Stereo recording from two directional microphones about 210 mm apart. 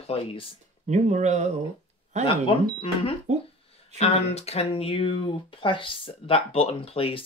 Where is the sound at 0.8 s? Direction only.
35° right (ahead or behind).